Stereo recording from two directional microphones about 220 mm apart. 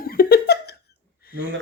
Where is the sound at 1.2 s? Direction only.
45° left (ahead or behind).